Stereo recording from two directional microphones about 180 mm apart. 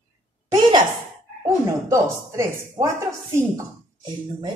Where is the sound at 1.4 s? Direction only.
20° right (ahead or behind).